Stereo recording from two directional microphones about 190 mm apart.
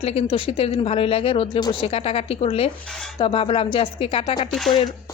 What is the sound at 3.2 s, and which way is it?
Speech, 25° left (ahead or behind).